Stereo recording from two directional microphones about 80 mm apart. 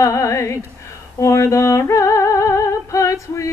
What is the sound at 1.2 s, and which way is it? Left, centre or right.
Female singing, left.